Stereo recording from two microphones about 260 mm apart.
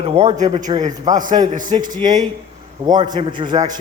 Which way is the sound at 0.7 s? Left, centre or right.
Centre.